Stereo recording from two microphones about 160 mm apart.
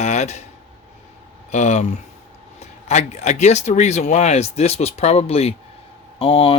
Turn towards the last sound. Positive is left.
turn(degrees=35)  # may be behind; listen again after turning